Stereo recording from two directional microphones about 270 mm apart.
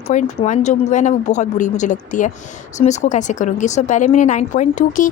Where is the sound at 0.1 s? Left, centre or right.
Left.